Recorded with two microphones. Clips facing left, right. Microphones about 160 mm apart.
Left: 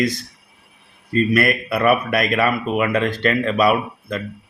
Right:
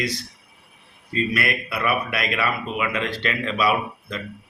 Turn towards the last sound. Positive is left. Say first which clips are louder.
# left 4 dB
turn(degrees=50)  # may be behind; listen again after turning